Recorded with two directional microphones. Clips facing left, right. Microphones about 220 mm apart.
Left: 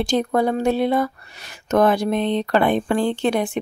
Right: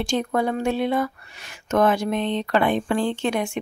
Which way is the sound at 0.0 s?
35° left (ahead or behind).